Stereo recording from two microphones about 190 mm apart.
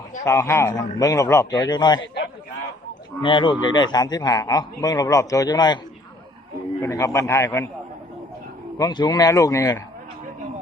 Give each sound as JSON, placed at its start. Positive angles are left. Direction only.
{"t": 0.3, "sound": "speech", "side_deg": 15}
{"t": 3.2, "sound": "speech", "side_deg": 25}
{"t": 6.8, "sound": "speech", "side_deg": 15}
{"t": 8.8, "sound": "speech", "side_deg": 20}